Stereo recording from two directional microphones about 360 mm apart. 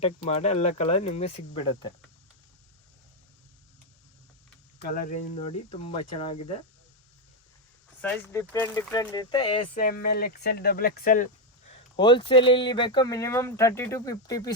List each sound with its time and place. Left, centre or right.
0.0 s speech: centre
4.8 s speech: left
8.0 s speech: centre
9.4 s speech: left
9.8 s speech: left